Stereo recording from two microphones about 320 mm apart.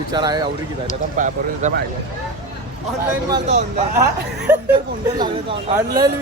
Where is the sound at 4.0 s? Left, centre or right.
Centre.